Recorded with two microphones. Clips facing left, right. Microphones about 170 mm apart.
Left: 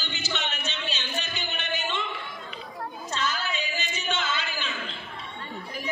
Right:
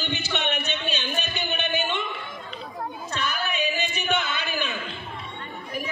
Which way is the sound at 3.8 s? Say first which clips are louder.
Right 5 dB; 60° right (ahead or behind).